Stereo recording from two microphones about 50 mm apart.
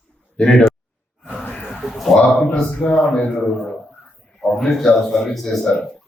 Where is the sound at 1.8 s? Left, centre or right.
Centre.